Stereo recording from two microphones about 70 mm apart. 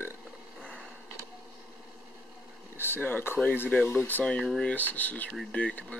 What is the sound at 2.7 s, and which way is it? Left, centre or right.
Speech, left.